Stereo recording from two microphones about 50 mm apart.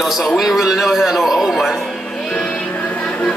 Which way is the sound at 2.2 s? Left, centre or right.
Centre.